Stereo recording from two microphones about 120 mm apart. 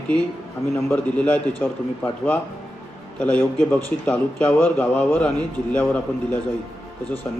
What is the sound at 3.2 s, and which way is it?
A man's voice, 15° left (ahead or behind).